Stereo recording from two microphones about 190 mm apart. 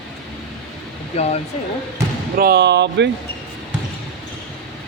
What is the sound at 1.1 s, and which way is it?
Speech, 35° left (ahead or behind).